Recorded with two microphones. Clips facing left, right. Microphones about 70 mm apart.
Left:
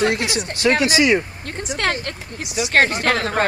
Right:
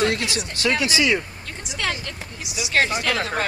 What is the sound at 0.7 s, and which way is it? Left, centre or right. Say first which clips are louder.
Speech: left 5 dB; left.